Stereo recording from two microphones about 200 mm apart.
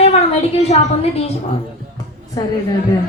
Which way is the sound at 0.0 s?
30° left (ahead or behind).